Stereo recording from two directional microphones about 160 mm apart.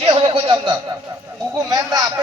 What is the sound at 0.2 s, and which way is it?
Speech, 35° right (ahead or behind).